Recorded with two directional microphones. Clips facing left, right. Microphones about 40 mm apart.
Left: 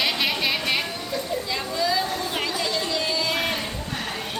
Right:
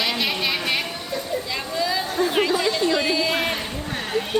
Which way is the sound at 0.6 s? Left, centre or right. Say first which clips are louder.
Right 1 dB; centre.